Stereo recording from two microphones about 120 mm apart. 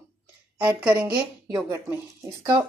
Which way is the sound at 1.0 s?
10° right (ahead or behind).